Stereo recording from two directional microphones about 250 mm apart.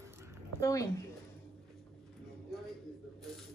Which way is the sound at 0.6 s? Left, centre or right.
Centre.